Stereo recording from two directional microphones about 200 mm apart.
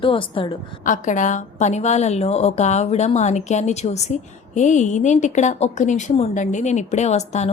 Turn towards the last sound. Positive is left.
turn(degrees=35)  # may be behind; listen again after turning